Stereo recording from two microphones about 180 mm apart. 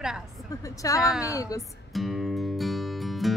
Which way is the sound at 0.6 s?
20° left (ahead or behind).